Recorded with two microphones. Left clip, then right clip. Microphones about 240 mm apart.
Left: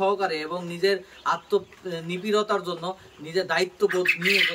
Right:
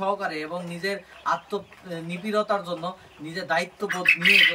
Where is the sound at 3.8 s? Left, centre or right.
Right.